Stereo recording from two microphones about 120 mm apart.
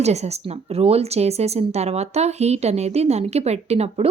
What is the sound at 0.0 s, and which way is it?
Speech, 65° right (ahead or behind).